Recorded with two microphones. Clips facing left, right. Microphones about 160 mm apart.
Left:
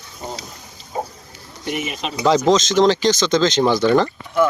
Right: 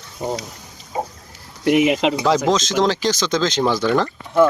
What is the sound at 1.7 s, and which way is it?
Speech, 90° right.